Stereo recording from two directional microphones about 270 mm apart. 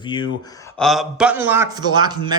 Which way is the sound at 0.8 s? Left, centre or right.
Centre.